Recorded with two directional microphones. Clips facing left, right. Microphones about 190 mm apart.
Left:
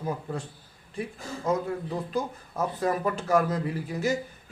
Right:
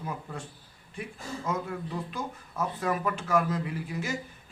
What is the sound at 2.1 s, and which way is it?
A man's voice, 35° left (ahead or behind).